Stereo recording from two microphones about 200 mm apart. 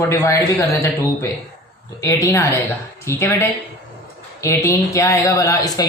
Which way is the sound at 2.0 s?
15° left (ahead or behind).